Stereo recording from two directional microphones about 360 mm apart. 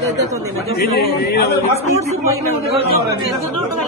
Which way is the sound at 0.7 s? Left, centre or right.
Left.